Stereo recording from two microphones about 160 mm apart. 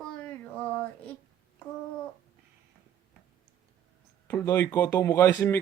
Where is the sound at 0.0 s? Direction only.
5° left (ahead or behind).